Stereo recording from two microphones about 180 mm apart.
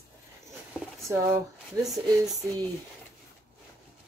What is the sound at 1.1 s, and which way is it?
Speech, 15° right (ahead or behind).